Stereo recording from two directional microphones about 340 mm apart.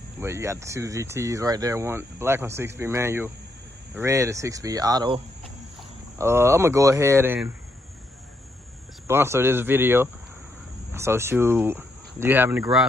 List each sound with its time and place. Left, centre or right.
0.2 s speech: centre
9.0 s speech: centre